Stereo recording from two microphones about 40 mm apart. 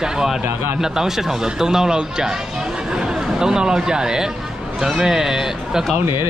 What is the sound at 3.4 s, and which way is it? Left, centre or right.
Speech, centre.